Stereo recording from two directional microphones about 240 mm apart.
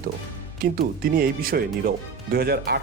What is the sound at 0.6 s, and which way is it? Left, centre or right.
Speech, right.